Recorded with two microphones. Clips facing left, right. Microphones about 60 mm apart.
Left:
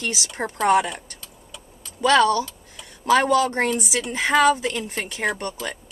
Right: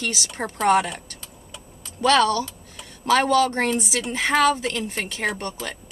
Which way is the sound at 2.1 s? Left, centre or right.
Centre.